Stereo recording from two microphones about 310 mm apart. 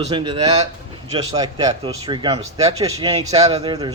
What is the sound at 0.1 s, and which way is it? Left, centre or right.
Speech, centre.